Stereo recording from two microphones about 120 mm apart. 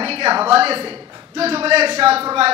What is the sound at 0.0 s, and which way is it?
A woman's voice, 50° right (ahead or behind).